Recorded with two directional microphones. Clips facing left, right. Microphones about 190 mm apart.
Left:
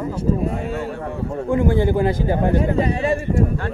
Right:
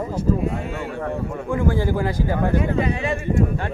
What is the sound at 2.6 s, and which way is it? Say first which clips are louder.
Speech: left 2 dB; 35° left (ahead or behind).